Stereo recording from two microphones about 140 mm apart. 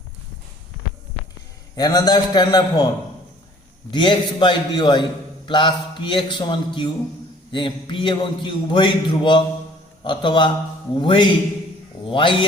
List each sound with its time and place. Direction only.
1.7 s a man's voice: 30° left (ahead or behind)
3.9 s a man's voice: 35° left (ahead or behind)